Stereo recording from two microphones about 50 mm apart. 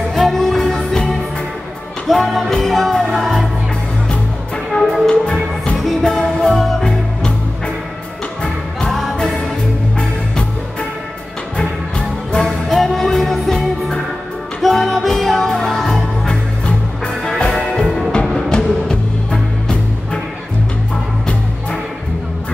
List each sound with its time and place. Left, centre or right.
0.1 s music: centre
4.7 s music: centre
5.2 s music: centre
5.8 s music: centre
6.8 s music: centre
8.8 s music: centre
9.9 s music: centre
12.4 s music: centre
16.3 s music: centre
17.5 s music: centre